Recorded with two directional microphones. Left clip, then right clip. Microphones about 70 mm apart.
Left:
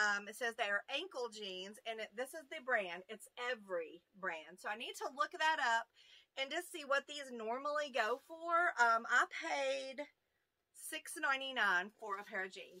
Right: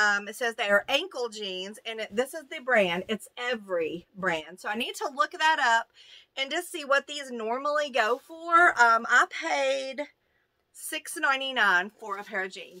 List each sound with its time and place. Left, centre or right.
0.0 s a sound: centre
0.4 s a woman's voice: right
1.9 s a woman's voice: right
10.9 s a woman's voice: right